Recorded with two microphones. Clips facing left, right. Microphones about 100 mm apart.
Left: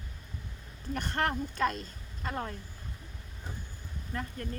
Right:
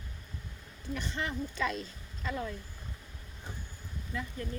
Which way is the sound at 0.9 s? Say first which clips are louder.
Left 5 dB; 55° left (ahead or behind).